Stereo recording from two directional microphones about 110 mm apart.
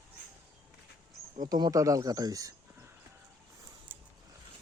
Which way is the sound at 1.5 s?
35° right (ahead or behind).